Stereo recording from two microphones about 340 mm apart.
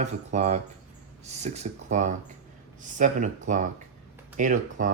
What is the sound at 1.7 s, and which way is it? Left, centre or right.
Speech, right.